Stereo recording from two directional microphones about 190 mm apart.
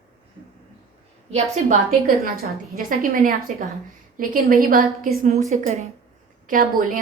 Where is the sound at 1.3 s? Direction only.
40° right (ahead or behind).